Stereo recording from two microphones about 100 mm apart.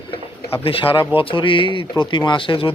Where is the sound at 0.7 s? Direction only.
65° left (ahead or behind).